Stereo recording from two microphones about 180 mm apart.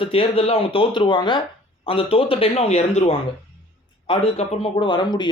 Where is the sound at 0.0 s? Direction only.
30° left (ahead or behind).